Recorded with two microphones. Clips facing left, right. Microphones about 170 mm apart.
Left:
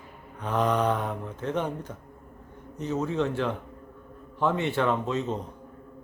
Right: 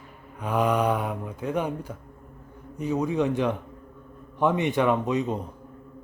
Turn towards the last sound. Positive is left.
turn(degrees=-15)  # may be behind; listen again after turning